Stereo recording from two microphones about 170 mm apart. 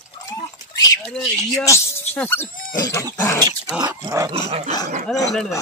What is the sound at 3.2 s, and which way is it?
Speech, 15° left (ahead or behind).